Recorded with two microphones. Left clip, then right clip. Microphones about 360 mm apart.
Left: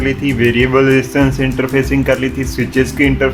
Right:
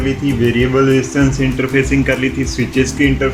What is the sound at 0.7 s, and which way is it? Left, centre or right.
Speech, left.